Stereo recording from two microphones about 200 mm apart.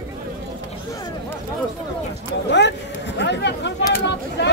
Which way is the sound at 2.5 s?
60° left (ahead or behind).